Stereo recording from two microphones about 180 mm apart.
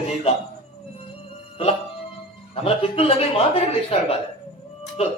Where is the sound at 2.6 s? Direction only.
30° left (ahead or behind).